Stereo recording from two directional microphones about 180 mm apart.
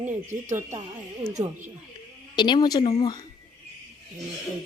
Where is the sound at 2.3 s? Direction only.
25° left (ahead or behind).